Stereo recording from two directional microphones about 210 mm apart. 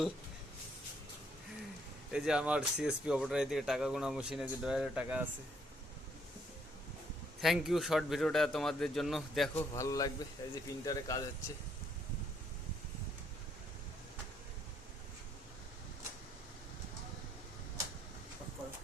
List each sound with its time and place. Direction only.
2.1 s speech: 5° right (ahead or behind)
7.4 s speech: centre (ahead or behind)
9.7 s speech: 15° left (ahead or behind)